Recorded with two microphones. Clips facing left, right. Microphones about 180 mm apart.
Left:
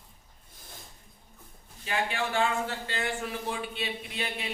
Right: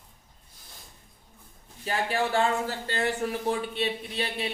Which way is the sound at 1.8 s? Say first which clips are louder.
Right 3 dB; 35° right (ahead or behind).